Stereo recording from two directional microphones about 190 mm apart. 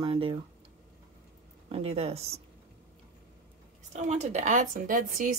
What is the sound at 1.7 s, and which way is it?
Speech, 30° right (ahead or behind).